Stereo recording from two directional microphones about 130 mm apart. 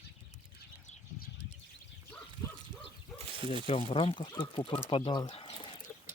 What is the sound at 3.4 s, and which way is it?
Speech, 40° right (ahead or behind).